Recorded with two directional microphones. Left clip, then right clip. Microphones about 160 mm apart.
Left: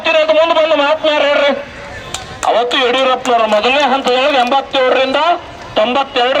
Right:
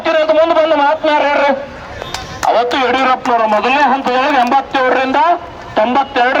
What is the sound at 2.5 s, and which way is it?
Speech, 15° left (ahead or behind).